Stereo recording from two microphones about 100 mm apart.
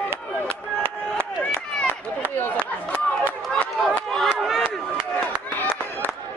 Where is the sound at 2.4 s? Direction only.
20° left (ahead or behind).